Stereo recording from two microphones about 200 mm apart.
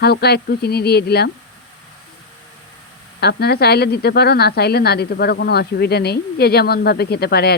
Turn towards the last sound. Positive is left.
turn(degrees=50)  # may be behind; listen again after turning